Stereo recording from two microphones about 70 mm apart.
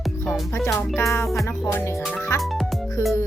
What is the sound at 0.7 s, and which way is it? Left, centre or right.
Speech, left.